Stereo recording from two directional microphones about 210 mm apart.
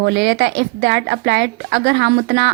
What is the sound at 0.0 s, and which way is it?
A woman's voice, 55° right (ahead or behind).